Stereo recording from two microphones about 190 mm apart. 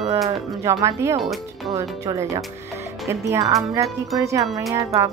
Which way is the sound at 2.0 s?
20° right (ahead or behind).